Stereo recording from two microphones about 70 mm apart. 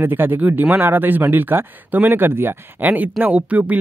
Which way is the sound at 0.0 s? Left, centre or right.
Right.